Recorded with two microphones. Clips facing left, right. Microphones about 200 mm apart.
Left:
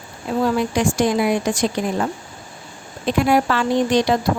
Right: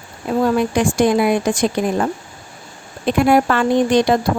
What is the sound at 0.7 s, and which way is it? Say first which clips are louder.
A woman's voice: right 3 dB; 55° right (ahead or behind).